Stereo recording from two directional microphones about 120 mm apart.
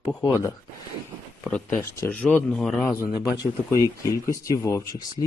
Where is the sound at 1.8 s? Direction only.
20° left (ahead or behind).